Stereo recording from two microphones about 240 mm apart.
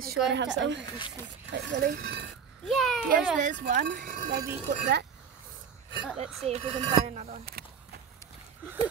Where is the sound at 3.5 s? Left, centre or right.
Right.